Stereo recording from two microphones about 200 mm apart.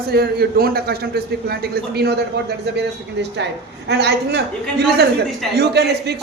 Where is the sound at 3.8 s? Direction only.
55° right (ahead or behind).